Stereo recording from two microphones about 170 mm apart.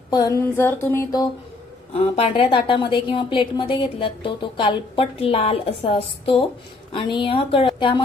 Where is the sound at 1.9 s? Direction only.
35° left (ahead or behind).